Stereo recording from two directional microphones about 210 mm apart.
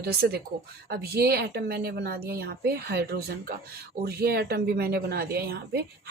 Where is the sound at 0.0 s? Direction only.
50° right (ahead or behind).